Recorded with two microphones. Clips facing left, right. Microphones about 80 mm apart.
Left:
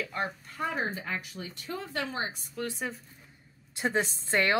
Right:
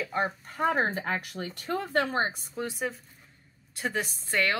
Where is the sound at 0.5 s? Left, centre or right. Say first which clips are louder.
Right 6 dB; right.